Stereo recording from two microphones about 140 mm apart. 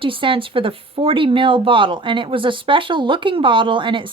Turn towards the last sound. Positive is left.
turn(degrees=-35)  # may be behind; listen again after turning